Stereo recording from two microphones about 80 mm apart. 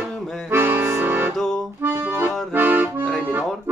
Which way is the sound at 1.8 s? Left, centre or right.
Right.